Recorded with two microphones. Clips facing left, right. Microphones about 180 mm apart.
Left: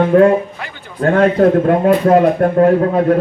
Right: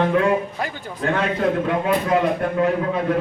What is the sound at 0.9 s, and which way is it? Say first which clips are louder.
A man's voice: left 11 dB; 50° left (ahead or behind).